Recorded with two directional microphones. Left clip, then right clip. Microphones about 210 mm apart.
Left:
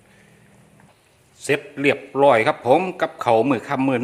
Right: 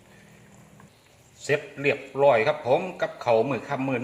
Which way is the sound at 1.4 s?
40° left (ahead or behind).